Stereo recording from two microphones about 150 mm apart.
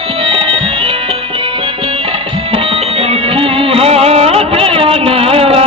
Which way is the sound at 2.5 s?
40° right (ahead or behind).